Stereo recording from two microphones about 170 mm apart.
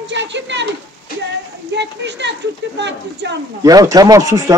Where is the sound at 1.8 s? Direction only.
90° right.